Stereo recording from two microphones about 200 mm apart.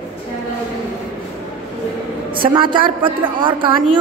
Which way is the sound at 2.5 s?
25° right (ahead or behind).